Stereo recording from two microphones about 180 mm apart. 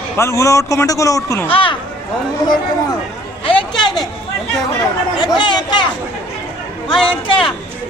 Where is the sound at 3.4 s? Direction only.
30° left (ahead or behind).